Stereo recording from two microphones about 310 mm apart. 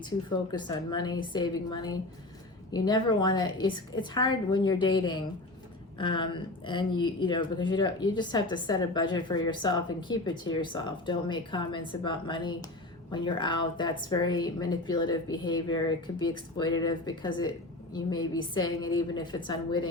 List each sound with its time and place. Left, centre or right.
0.0 s a woman's voice: centre